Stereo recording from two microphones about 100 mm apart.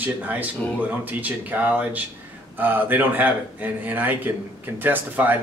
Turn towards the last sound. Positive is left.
turn(degrees=-20)  # may be behind; listen again after turning